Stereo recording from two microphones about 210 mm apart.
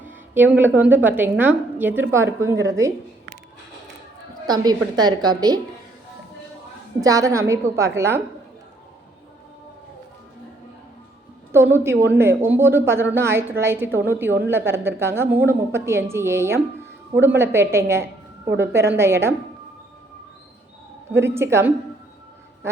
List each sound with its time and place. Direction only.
0.0 s a woman's voice: 10° right (ahead or behind)
4.4 s a woman's voice: 20° right (ahead or behind)
7.0 s a woman's voice: 15° right (ahead or behind)
11.5 s a woman's voice: 10° right (ahead or behind)
21.2 s a woman's voice: 10° right (ahead or behind)
22.6 s quack: 10° right (ahead or behind)